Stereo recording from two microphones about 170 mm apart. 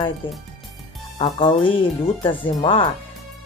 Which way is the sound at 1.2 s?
30° left (ahead or behind).